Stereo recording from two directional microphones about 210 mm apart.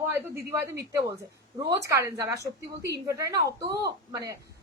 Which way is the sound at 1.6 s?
15° right (ahead or behind).